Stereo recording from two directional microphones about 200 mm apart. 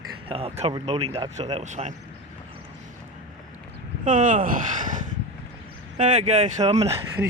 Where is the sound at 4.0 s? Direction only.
40° right (ahead or behind).